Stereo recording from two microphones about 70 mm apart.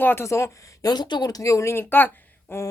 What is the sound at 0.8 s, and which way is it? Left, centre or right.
A woman's voice, left.